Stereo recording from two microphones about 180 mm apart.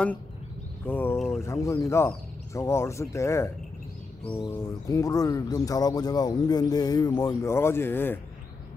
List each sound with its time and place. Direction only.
0.8 s speech: 10° left (ahead or behind)
4.2 s a sound: 5° left (ahead or behind)
4.8 s speech: 20° left (ahead or behind)